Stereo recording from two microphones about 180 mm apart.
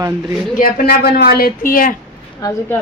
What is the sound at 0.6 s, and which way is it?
Speech, 55° left (ahead or behind).